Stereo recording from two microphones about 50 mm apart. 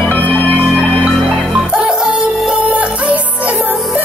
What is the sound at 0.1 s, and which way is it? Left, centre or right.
Music, left.